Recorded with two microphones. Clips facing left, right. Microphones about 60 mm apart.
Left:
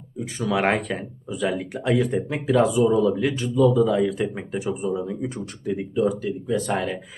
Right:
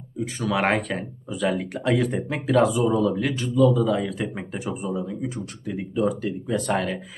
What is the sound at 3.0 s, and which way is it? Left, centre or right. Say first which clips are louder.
A man's voice: left 2 dB; centre.